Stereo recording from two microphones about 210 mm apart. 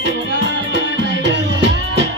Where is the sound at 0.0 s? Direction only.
55° right (ahead or behind).